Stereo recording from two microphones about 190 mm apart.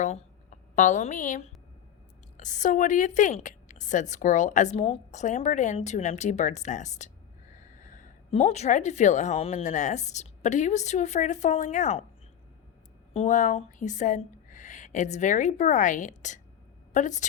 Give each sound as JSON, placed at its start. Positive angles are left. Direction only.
{"t": 0.8, "sound": "a woman's voice", "side_deg": 40}
{"t": 13.1, "sound": "a woman's voice", "side_deg": 40}